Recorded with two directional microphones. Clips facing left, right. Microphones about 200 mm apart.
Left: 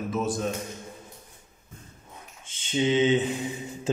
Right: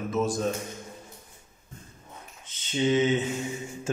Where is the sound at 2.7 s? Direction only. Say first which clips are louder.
Even; 15° left (ahead or behind).